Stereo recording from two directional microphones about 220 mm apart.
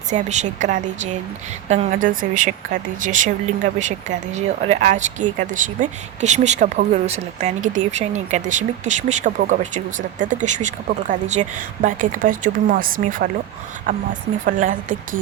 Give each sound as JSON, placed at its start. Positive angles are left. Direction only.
{"t": 0.1, "sound": "speech", "side_deg": -30}